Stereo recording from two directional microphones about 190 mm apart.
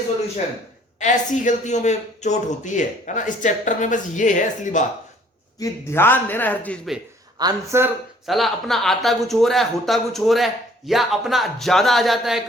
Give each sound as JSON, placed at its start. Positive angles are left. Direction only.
{"t": 0.9, "sound": "speech", "side_deg": 40}
{"t": 5.5, "sound": "a man's voice", "side_deg": 10}
{"t": 7.3, "sound": "speech", "side_deg": -15}
{"t": 8.3, "sound": "speech", "side_deg": 0}